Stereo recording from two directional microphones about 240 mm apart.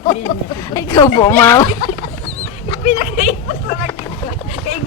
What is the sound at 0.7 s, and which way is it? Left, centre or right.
Speech, centre.